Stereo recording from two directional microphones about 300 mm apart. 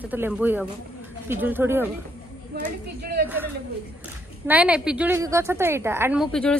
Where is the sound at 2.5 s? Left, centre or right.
Right.